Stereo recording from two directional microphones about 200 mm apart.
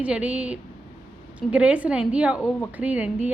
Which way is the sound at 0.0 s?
5° right (ahead or behind).